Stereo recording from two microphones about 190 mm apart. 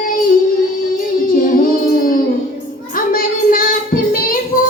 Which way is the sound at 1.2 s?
50° left (ahead or behind).